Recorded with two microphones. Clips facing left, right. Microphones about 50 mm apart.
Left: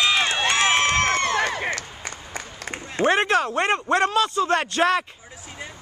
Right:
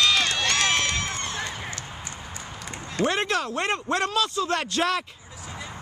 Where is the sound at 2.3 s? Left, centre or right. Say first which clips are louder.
Left 4 dB; left.